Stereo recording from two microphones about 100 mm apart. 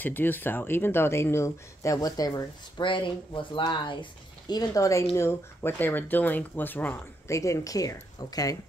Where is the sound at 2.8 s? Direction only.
55° left (ahead or behind); by 7.0 s 20° left (ahead or behind).